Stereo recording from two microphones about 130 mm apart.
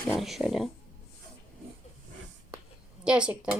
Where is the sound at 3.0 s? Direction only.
10° right (ahead or behind).